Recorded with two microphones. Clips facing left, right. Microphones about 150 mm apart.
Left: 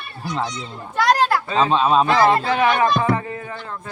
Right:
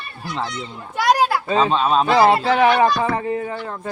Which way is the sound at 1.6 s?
5° left (ahead or behind).